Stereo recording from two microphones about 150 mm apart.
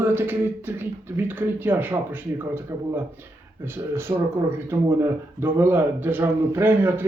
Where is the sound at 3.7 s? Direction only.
15° right (ahead or behind).